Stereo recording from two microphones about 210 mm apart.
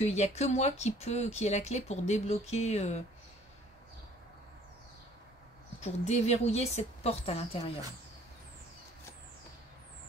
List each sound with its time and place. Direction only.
0.0 s speech: 30° left (ahead or behind)
5.8 s speech: 30° left (ahead or behind)